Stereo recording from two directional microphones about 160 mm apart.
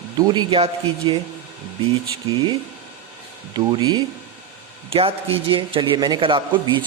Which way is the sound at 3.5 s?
25° right (ahead or behind).